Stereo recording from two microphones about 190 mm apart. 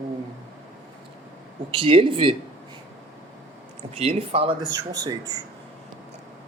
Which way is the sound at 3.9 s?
35° right (ahead or behind).